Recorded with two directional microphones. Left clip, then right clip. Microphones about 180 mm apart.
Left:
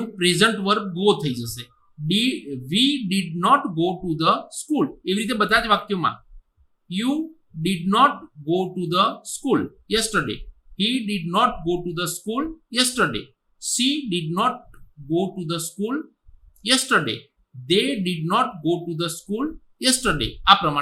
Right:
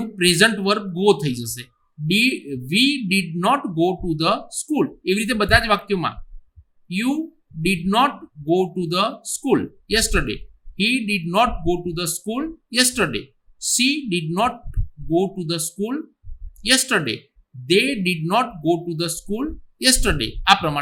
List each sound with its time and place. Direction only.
0.2 s speech: 55° right (ahead or behind)